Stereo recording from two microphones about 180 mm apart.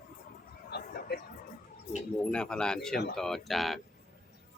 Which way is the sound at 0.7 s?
65° left (ahead or behind).